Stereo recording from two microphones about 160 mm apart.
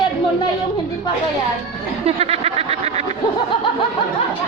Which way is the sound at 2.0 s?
40° right (ahead or behind).